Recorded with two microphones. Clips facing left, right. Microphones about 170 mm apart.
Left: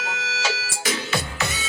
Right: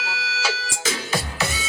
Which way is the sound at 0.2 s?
10° right (ahead or behind).